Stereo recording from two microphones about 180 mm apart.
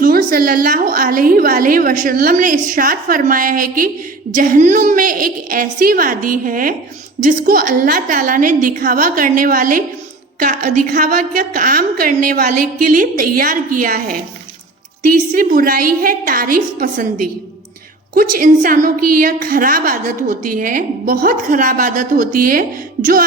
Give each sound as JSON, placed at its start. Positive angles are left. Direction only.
{"t": 0.0, "sound": "a woman's voice", "side_deg": -55}